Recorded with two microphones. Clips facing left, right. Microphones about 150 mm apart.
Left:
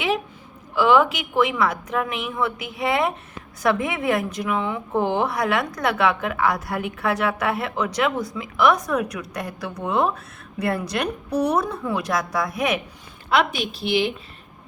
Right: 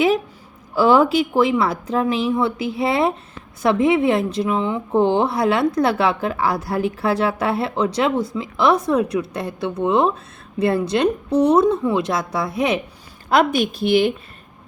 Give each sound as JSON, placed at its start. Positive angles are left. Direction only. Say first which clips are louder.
{"t": 0.8, "sound": "a woman's voice", "louder": "right 3 dB", "side_deg": -35}
{"t": 13.3, "sound": "a woman's voice", "louder": "right 5 dB", "side_deg": -45}